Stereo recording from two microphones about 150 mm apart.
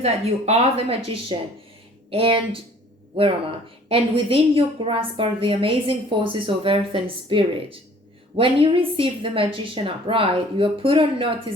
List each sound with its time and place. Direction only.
0.0 s a woman's voice: 45° right (ahead or behind)
3.8 s a woman's voice: 40° right (ahead or behind)